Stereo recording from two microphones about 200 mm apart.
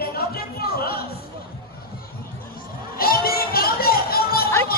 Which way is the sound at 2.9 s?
50° left (ahead or behind).